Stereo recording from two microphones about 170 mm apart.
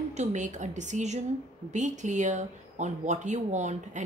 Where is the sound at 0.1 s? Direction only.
45° right (ahead or behind).